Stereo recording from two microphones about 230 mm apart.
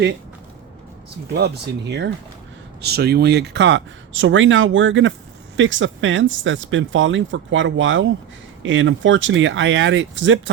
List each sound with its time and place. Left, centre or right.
1.3 s speech: right